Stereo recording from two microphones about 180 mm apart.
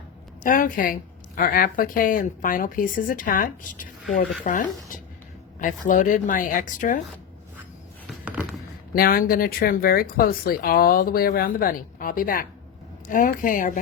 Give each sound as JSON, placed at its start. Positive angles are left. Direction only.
{"t": 0.4, "sound": "a woman's voice", "side_deg": 50}
{"t": 8.2, "sound": "a sound", "side_deg": -5}
{"t": 8.9, "sound": "a woman's voice", "side_deg": 55}